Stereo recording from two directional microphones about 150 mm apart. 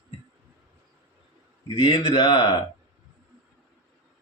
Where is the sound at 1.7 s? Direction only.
35° left (ahead or behind).